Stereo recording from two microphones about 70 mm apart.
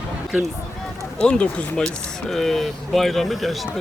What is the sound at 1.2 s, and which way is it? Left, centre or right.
Speech, centre.